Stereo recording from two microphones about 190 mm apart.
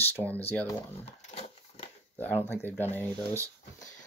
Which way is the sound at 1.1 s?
35° left (ahead or behind).